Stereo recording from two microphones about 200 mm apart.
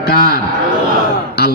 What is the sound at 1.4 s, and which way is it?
Speech, 55° left (ahead or behind).